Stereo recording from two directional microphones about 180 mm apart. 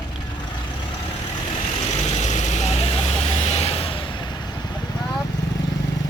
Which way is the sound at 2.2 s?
40° left (ahead or behind).